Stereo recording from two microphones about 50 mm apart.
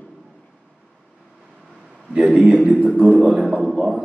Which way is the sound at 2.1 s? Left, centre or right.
Right.